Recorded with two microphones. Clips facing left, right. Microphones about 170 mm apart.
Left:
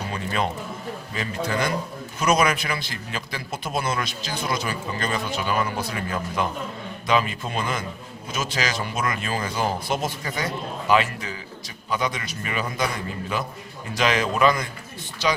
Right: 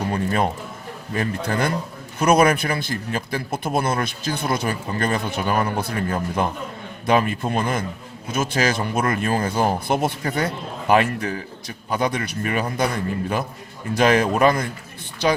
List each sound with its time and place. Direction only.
0.1 s a sound: 50° right (ahead or behind)
1.1 s a man's voice: 50° right (ahead or behind)
13.9 s a man's voice: 50° right (ahead or behind)